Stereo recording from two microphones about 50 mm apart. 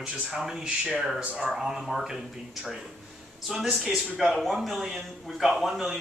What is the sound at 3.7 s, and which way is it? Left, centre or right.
A man's voice, centre.